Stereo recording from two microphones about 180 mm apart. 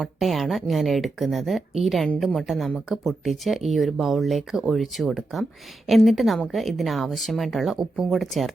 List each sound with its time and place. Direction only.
0.0 s speech: centre (ahead or behind)